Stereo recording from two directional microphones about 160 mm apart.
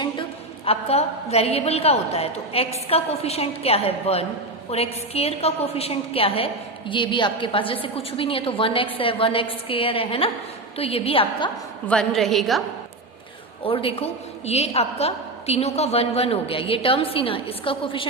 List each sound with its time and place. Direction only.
0.0 s a woman's voice: 35° left (ahead or behind)
11.9 s a woman's voice: 5° left (ahead or behind)
13.7 s a woman's voice: 35° left (ahead or behind)